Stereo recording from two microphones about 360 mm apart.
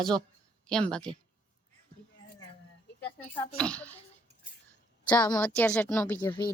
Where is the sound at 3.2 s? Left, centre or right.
Centre.